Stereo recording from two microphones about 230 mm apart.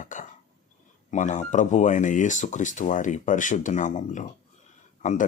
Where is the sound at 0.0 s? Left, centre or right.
Left.